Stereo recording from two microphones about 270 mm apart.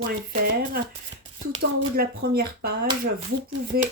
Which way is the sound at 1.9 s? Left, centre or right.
Right.